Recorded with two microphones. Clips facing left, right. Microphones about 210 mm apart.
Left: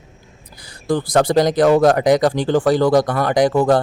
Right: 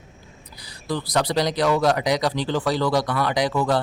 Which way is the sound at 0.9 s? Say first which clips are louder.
Left 7 dB; 50° left (ahead or behind).